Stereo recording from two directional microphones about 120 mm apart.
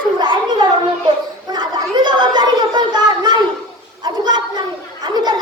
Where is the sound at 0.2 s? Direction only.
40° right (ahead or behind).